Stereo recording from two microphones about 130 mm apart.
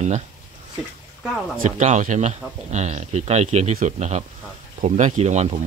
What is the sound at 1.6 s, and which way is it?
Speech, 70° right (ahead or behind).